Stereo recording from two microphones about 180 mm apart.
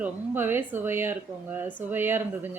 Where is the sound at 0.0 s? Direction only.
10° right (ahead or behind).